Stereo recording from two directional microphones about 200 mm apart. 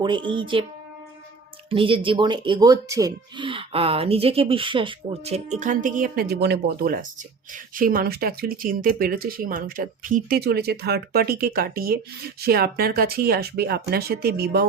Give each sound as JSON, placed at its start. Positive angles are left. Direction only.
{"t": 0.0, "sound": "speech", "side_deg": -25}
{"t": 1.7, "sound": "speech", "side_deg": -25}